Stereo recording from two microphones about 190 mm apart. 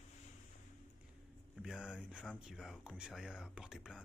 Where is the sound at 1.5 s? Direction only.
5° right (ahead or behind).